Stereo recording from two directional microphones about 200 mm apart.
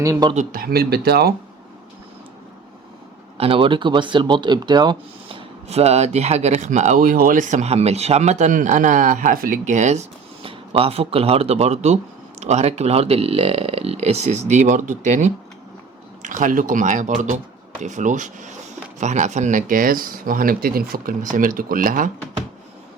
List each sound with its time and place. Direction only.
0.0 s a man's voice: 20° right (ahead or behind)
0.3 s speech: 50° right (ahead or behind)
3.3 s speech: 30° right (ahead or behind)